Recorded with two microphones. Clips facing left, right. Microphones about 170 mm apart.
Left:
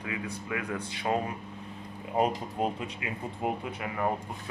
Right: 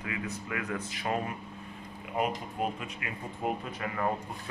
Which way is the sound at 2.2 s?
30° left (ahead or behind).